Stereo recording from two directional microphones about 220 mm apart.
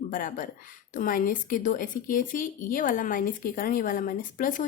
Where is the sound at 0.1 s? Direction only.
40° left (ahead or behind).